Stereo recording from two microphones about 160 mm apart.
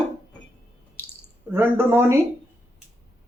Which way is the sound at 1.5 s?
15° right (ahead or behind).